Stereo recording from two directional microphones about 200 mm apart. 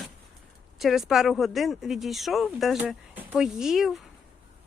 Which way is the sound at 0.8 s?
Centre (ahead or behind).